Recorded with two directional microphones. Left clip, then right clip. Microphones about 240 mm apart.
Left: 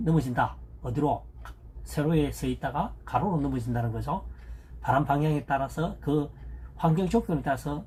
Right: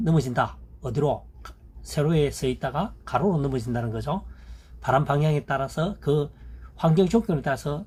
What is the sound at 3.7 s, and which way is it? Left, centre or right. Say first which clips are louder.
Speech: right 2 dB; right.